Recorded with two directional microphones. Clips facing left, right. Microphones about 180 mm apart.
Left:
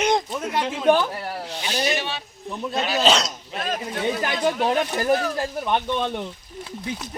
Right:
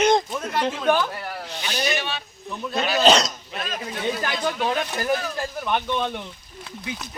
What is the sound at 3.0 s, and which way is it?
Speech, 5° left (ahead or behind).